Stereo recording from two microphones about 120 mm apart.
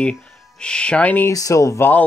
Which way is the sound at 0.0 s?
10° left (ahead or behind).